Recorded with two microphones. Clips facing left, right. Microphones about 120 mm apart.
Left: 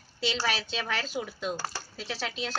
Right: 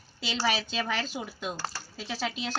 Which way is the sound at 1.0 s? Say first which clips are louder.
Left 2 dB; 5° right (ahead or behind).